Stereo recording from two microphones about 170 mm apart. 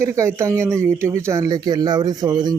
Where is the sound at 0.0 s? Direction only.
15° right (ahead or behind).